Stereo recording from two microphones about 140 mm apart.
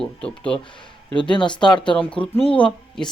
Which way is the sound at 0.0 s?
5° left (ahead or behind).